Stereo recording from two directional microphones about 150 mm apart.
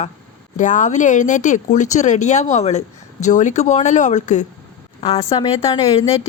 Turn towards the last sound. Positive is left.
turn(degrees=40)  # may be behind; listen again after turning